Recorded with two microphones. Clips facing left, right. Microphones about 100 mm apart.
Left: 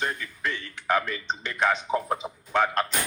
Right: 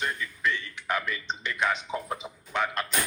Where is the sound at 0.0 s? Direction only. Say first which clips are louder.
Even; 40° left (ahead or behind).